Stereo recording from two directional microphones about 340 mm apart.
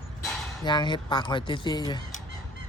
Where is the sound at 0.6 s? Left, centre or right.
Centre.